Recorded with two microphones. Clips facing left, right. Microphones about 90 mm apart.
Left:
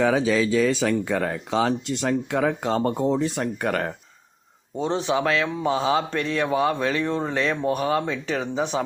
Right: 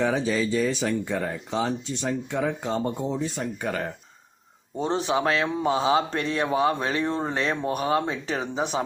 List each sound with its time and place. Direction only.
0.0 s speech: 90° left; by 3.9 s 60° left (ahead or behind)
5.0 s speech: 30° right (ahead or behind)